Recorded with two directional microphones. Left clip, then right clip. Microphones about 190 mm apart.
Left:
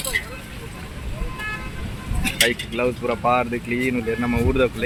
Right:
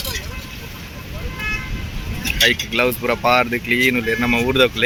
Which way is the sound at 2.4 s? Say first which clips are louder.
Right 5 dB; 5° right (ahead or behind).